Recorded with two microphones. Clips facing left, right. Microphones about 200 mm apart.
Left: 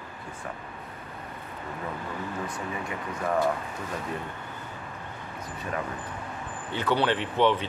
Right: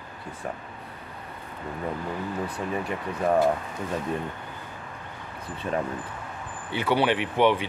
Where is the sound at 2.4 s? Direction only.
35° right (ahead or behind).